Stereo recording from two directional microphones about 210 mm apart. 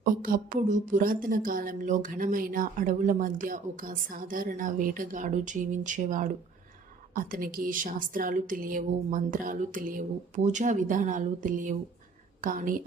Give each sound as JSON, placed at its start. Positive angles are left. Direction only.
{"t": 0.0, "sound": "a woman's voice", "side_deg": -40}